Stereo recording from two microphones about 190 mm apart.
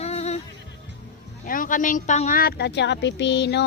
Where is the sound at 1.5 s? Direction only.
45° left (ahead or behind).